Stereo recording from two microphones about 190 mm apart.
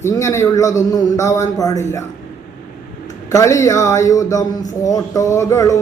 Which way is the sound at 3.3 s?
15° left (ahead or behind).